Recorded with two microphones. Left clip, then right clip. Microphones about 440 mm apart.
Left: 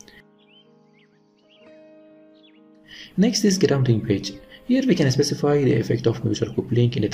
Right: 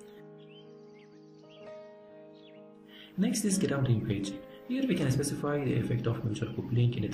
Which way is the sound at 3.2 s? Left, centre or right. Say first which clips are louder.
Left 12 dB; centre.